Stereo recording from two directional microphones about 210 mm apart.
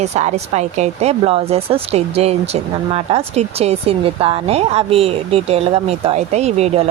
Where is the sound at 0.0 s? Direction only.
30° right (ahead or behind).